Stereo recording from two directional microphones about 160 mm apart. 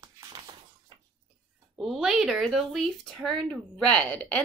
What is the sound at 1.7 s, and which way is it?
A woman's voice, centre (ahead or behind).